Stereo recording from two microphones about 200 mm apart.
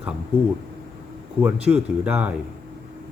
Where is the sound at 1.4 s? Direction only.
5° right (ahead or behind).